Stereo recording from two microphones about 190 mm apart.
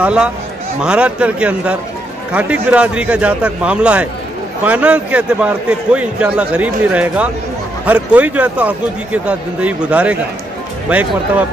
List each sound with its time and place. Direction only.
0.0 s a man's voice: 5° right (ahead or behind)